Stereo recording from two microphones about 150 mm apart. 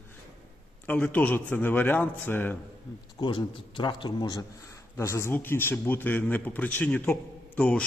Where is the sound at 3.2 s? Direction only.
30° left (ahead or behind).